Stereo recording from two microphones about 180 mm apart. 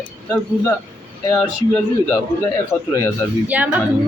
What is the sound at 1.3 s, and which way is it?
Speech, 5° left (ahead or behind).